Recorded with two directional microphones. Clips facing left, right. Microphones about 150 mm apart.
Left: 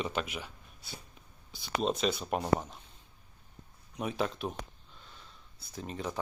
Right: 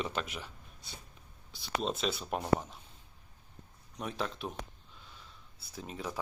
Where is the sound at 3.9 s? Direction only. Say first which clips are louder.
Left 4 dB; 5° left (ahead or behind).